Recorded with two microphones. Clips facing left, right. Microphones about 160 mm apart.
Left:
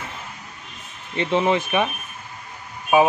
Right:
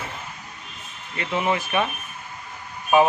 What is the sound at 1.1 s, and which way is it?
Speech, 25° left (ahead or behind).